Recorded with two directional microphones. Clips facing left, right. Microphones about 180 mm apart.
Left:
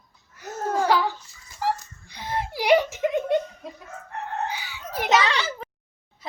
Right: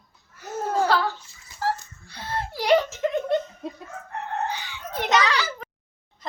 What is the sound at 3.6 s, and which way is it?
Chicken, 30° right (ahead or behind).